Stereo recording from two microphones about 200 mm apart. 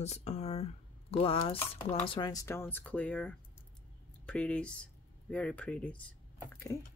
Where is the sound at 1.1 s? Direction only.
30° left (ahead or behind).